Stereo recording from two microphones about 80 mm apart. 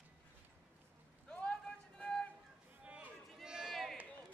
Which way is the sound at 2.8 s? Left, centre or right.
Centre.